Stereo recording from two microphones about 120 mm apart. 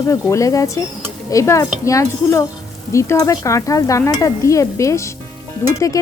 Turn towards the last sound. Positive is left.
turn(degrees=25)  # may be behind; listen again after turning